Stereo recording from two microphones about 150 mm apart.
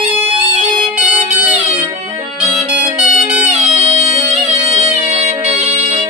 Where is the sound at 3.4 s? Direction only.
45° right (ahead or behind).